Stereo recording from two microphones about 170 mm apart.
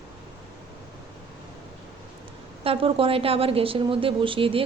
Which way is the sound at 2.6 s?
30° right (ahead or behind).